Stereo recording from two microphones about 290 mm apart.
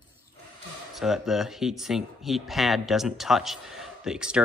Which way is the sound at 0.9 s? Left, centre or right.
Centre.